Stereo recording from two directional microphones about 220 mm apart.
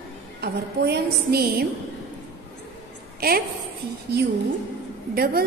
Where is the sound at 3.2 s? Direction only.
45° right (ahead or behind).